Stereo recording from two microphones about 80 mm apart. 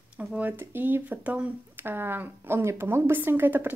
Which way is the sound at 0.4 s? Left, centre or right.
Right.